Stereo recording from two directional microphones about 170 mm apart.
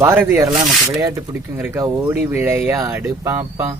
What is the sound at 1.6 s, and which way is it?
Speech, 15° right (ahead or behind).